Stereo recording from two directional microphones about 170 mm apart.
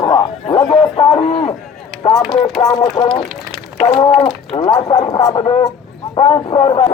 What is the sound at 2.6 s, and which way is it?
Speech, 20° left (ahead or behind).